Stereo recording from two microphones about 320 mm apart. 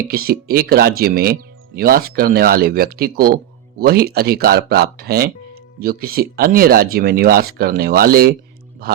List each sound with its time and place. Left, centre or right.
0.1 s speech: right